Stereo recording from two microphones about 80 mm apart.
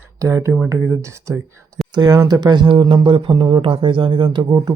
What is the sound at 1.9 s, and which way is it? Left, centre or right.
Speech, right.